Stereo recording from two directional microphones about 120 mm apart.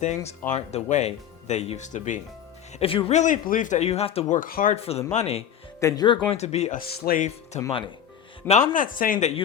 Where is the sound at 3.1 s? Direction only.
80° left; by 4.3 s 55° left (ahead or behind).